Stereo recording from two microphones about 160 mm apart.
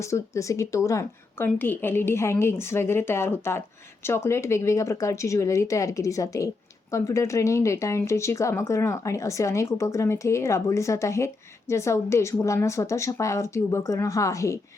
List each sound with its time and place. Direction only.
0.0 s a woman's voice: 20° left (ahead or behind)